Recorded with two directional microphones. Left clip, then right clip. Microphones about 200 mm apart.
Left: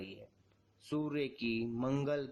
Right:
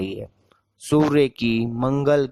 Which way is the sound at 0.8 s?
45° right (ahead or behind).